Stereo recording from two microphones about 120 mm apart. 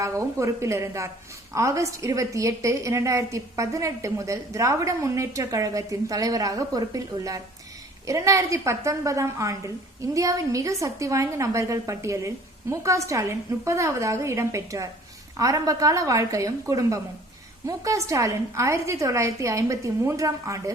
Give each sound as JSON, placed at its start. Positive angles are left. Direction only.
{"t": 0.0, "sound": "a woman's voice", "side_deg": -25}